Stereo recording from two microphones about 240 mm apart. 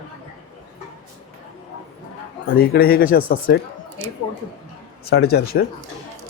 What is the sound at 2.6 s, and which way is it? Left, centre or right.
Speech, left.